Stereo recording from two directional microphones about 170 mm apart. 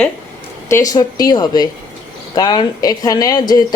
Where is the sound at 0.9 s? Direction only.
25° left (ahead or behind).